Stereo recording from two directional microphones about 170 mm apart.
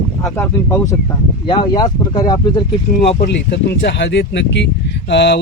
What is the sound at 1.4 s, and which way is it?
Speech, 25° left (ahead or behind).